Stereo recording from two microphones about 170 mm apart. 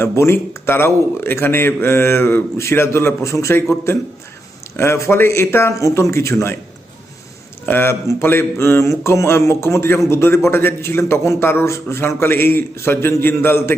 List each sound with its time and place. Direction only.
0.0 s speech: 15° left (ahead or behind)
7.6 s speech: 15° left (ahead or behind)